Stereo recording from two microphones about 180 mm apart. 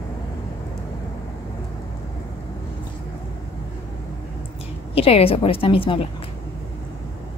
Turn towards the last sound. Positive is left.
turn(degrees=30)  # may be behind; listen again after turning